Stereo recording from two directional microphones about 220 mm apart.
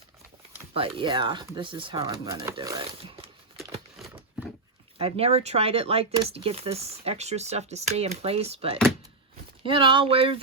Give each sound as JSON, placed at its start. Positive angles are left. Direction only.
{"t": 0.7, "sound": "speech", "side_deg": -25}
{"t": 3.6, "sound": "crumpling", "side_deg": -5}
{"t": 4.9, "sound": "speech", "side_deg": -25}